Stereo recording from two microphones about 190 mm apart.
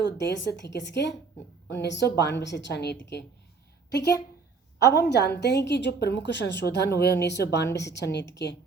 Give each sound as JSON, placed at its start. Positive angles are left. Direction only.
{"t": 0.0, "sound": "a woman's voice", "side_deg": 65}